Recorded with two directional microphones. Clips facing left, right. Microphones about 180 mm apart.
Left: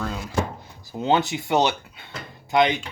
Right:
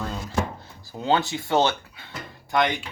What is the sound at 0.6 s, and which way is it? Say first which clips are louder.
Speech: left 3 dB; 20° left (ahead or behind).